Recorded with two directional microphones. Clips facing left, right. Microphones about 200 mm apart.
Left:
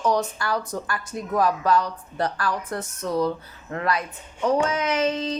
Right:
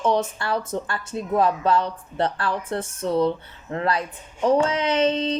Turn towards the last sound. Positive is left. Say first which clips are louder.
# right 3 dB
turn(degrees=-30)  # may be behind; listen again after turning